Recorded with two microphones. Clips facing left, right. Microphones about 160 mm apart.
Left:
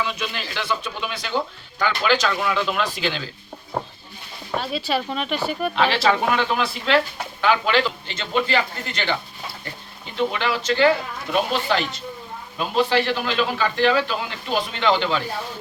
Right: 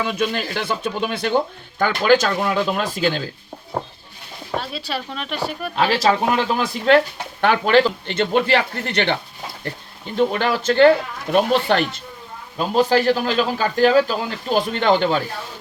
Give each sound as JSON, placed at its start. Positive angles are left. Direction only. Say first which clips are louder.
{"t": 0.0, "sound": "speech", "louder": "right 5 dB", "side_deg": -50}
{"t": 4.5, "sound": "speech", "louder": "left 2 dB", "side_deg": 0}
{"t": 5.7, "sound": "a man's voice", "louder": "right 3 dB", "side_deg": -40}
{"t": 6.9, "sound": "speech", "louder": "right 7 dB", "side_deg": -45}
{"t": 8.1, "sound": "speech", "louder": "right 4 dB", "side_deg": -60}
{"t": 10.2, "sound": "speech", "louder": "right 4 dB", "side_deg": -50}
{"t": 12.5, "sound": "a man's voice", "louder": "right 3 dB", "side_deg": -40}